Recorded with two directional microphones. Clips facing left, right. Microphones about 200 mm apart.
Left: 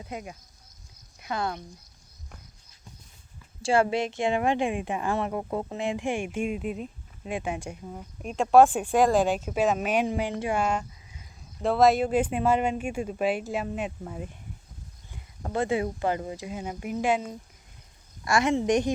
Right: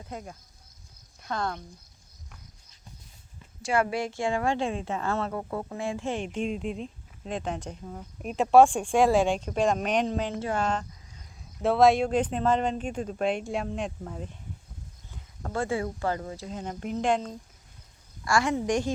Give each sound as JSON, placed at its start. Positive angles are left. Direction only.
{"t": 0.0, "sound": "speech", "side_deg": 15}
{"t": 3.6, "sound": "speech", "side_deg": 30}
{"t": 10.4, "sound": "a sound", "side_deg": 10}
{"t": 11.6, "sound": "speech", "side_deg": 0}
{"t": 15.1, "sound": "speech", "side_deg": 20}
{"t": 18.3, "sound": "speech", "side_deg": 20}